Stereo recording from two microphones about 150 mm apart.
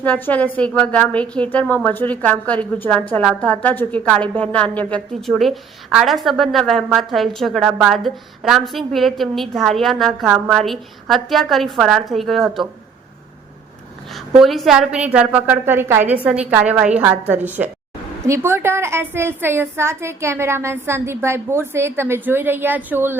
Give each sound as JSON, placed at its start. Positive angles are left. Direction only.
{"t": 0.0, "sound": "a woman's voice", "side_deg": 10}
{"t": 14.3, "sound": "a woman's voice", "side_deg": 0}
{"t": 17.6, "sound": "a woman's voice", "side_deg": -5}